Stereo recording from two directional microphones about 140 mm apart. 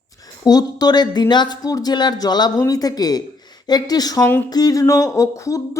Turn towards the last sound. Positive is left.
turn(degrees=25)  # may be behind; listen again after turning